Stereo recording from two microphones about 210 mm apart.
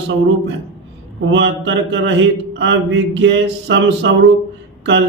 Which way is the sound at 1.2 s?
60° right (ahead or behind).